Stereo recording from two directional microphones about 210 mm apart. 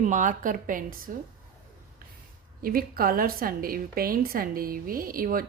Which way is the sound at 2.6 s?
45° right (ahead or behind).